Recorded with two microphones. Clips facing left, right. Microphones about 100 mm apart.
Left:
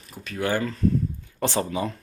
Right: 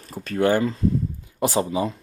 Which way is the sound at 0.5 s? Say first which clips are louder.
Right 5 dB; 25° right (ahead or behind).